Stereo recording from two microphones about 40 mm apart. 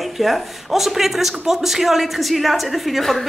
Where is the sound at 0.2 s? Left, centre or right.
Centre.